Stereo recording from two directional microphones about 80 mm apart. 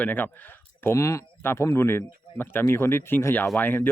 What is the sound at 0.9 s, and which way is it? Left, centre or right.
Speech, left.